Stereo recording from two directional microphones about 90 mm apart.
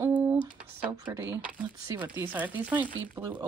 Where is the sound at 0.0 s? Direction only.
15° right (ahead or behind).